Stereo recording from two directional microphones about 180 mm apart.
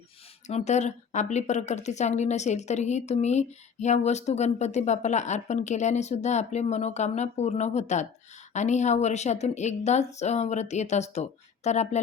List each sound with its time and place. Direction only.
0.4 s a woman's voice: 40° left (ahead or behind)